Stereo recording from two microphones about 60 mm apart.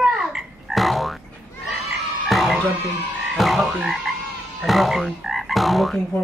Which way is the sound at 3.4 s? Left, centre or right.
Centre.